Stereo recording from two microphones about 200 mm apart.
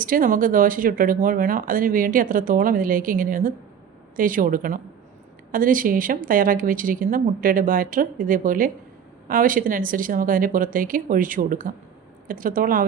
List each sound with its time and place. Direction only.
0.0 s speech: 45° right (ahead or behind)